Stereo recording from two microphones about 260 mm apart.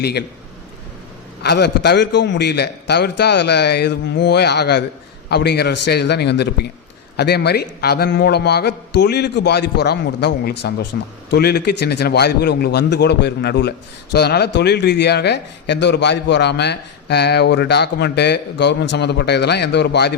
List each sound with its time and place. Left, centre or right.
0.0 s a man's voice: left
1.4 s a man's voice: left